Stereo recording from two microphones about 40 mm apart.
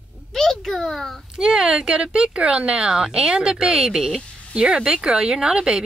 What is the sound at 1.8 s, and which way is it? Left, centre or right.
Speech, right.